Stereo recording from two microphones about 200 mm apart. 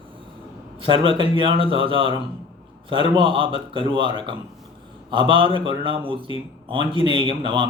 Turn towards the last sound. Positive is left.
turn(degrees=-25)  # may be behind; listen again after turning